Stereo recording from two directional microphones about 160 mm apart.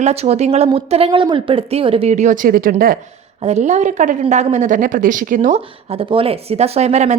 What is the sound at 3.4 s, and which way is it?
A woman's voice, 45° right (ahead or behind).